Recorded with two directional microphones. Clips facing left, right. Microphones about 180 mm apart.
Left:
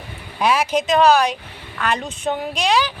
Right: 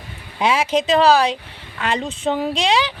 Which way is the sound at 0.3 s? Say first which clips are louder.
Even; 25° right (ahead or behind).